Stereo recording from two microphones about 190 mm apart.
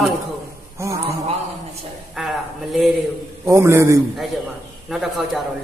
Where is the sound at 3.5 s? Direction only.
15° right (ahead or behind).